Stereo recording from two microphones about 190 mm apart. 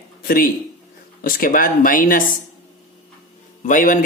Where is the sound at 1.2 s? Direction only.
45° left (ahead or behind).